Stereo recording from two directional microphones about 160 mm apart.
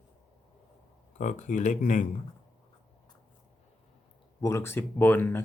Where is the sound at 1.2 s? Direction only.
50° left (ahead or behind).